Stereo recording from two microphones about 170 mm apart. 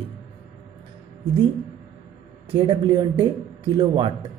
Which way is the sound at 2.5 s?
30° right (ahead or behind).